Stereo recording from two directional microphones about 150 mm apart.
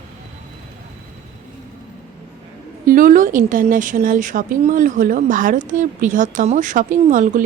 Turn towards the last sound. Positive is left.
turn(degrees=-60)  # may be behind; listen again after turning